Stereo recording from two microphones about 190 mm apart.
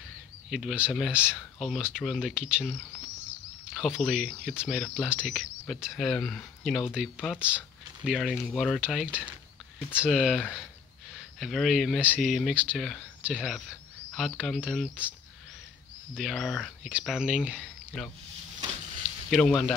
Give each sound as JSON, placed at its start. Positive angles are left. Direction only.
{"t": 0.5, "sound": "speech", "side_deg": 0}
{"t": 9.8, "sound": "speech", "side_deg": 10}
{"t": 16.2, "sound": "speech", "side_deg": 0}
{"t": 19.3, "sound": "speech", "side_deg": 0}